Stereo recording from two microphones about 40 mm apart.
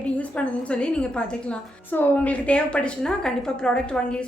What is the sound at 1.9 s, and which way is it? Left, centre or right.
Speech, left.